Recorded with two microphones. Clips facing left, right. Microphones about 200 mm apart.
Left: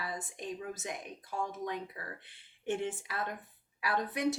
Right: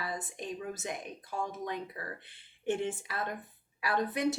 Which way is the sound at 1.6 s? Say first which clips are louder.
Right 1 dB; 5° left (ahead or behind).